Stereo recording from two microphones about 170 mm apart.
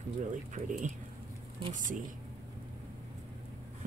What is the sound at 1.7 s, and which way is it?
Speech, 50° right (ahead or behind).